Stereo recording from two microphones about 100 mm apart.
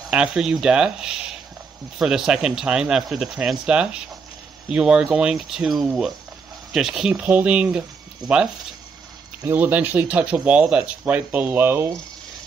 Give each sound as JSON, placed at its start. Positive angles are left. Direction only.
{"t": 0.1, "sound": "speech", "side_deg": -10}